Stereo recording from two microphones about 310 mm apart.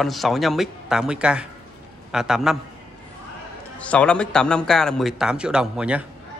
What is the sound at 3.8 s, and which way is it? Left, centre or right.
A man's voice, centre.